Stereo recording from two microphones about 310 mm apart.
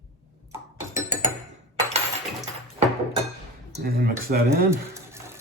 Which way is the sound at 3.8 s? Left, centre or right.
Right.